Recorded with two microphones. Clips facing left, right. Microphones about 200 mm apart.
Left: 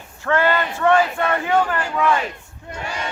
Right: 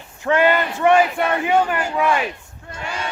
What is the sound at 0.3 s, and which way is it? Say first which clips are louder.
Speech: right 2 dB; 15° right (ahead or behind).